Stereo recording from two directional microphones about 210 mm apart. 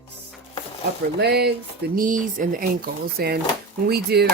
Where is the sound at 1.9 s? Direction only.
40° right (ahead or behind).